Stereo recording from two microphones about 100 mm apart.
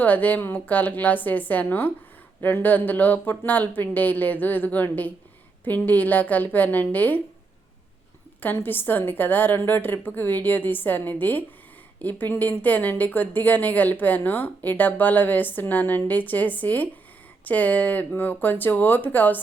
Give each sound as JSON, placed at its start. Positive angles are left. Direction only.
{"t": 0.0, "sound": "a woman's voice", "side_deg": 15}
{"t": 8.4, "sound": "a woman's voice", "side_deg": 20}